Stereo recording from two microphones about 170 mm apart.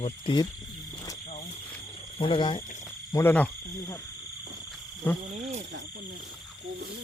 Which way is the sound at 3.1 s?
10° left (ahead or behind).